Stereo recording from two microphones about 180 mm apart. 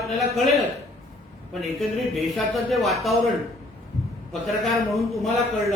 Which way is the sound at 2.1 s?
Centre (ahead or behind).